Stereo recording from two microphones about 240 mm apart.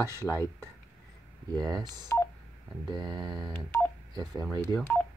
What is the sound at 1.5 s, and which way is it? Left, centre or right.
Speech, centre.